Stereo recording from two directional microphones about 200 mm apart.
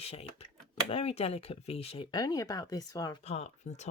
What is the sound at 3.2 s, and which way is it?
Speech, 35° left (ahead or behind).